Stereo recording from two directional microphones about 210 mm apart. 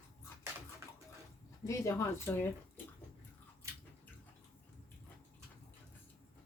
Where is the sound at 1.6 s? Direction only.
15° left (ahead or behind).